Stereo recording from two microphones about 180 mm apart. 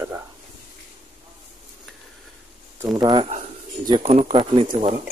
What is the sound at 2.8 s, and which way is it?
Speech, 20° right (ahead or behind).